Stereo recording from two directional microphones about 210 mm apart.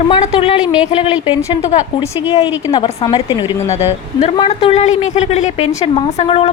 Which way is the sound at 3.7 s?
30° left (ahead or behind).